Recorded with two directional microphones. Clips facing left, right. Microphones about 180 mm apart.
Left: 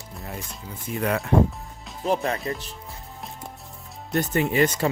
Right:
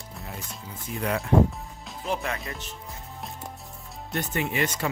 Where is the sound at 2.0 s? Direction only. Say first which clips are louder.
Left 6 dB; 35° left (ahead or behind).